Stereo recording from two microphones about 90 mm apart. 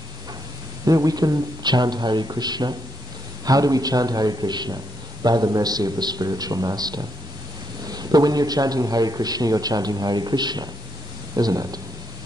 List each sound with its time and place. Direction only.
0.8 s a man's voice: 45° right (ahead or behind)